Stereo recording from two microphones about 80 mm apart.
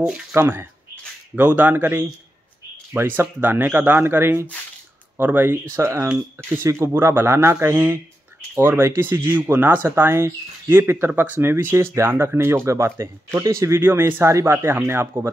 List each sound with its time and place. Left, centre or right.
0.3 s speech: right
13.8 s speech: right